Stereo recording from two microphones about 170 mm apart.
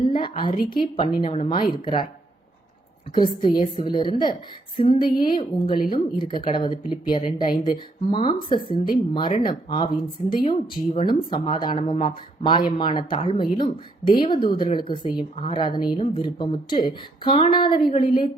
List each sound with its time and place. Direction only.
0.0 s a sound: 30° left (ahead or behind)
0.8 s speech: 30° left (ahead or behind)
3.2 s a woman's voice: 25° left (ahead or behind)